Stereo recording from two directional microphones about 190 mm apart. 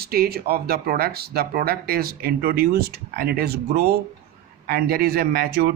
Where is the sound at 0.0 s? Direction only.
55° right (ahead or behind).